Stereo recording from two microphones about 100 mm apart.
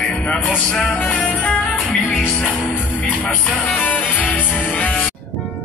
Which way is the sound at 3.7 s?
15° left (ahead or behind).